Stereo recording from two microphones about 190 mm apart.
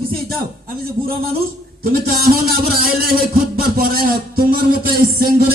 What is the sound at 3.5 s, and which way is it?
Speech, 50° right (ahead or behind).